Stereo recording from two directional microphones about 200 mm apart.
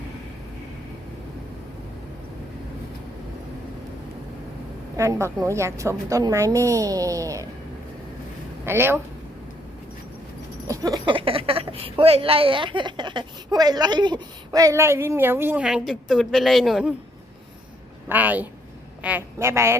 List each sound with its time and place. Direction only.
4.9 s a woman's voice: 15° right (ahead or behind)
8.6 s a woman's voice: 10° right (ahead or behind)
10.7 s speech: 20° right (ahead or behind); by 16.9 s centre (ahead or behind)
18.1 s a woman's voice: 10° right (ahead or behind)